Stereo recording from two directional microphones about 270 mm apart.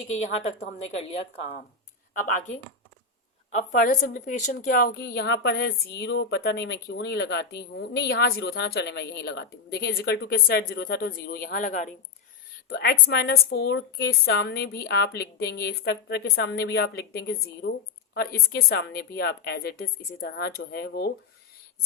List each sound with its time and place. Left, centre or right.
0.9 s speech: left
3.5 s a woman's voice: left